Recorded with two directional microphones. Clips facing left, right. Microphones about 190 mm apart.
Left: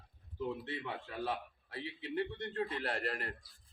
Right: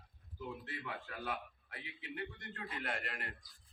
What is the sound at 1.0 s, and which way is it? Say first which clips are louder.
A man's voice: left 4 dB; 30° left (ahead or behind).